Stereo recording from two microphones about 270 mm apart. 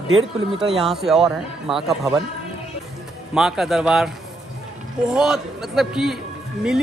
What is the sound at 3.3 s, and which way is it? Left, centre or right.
Speech, centre.